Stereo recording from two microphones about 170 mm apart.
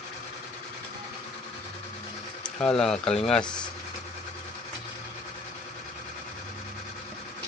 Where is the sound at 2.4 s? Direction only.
5° left (ahead or behind).